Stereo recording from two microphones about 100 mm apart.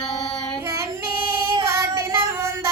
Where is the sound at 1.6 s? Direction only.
30° right (ahead or behind).